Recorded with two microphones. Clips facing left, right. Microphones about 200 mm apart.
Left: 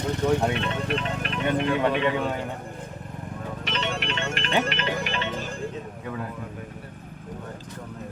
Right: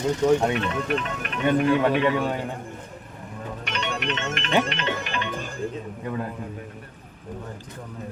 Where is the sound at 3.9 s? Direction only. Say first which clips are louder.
Right 1 dB; 30° left (ahead or behind).